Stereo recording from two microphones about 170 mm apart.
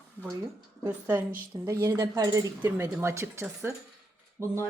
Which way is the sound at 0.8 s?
10° right (ahead or behind).